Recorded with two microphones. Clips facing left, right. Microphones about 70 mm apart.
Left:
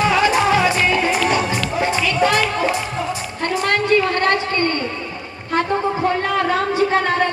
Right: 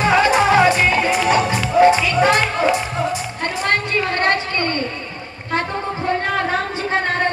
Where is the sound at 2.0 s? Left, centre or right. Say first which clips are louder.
Right 1 dB; right.